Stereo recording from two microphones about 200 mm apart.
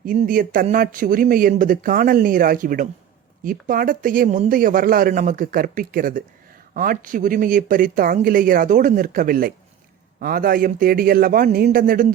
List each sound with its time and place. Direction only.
0.0 s speech: 45° right (ahead or behind)